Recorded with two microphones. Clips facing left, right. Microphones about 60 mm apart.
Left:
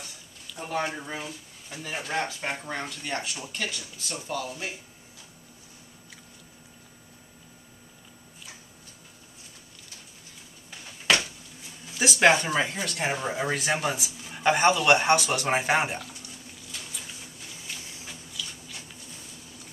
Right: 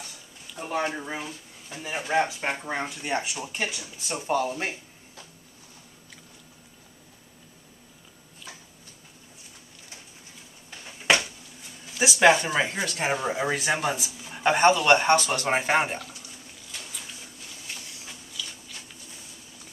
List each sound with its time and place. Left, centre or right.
0.6 s speech: centre; by 5.2 s right
10.8 s a sound: centre
12.2 s a man's voice: centre
14.9 s a man's voice: centre